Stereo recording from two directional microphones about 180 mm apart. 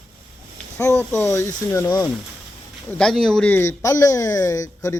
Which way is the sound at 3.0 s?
5° left (ahead or behind).